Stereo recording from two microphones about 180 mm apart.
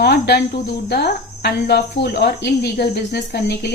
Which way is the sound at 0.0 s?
65° left (ahead or behind).